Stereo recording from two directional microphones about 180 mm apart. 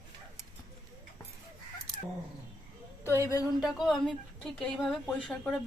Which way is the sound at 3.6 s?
Centre (ahead or behind).